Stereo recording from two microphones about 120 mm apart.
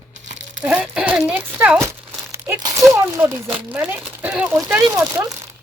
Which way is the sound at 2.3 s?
20° right (ahead or behind).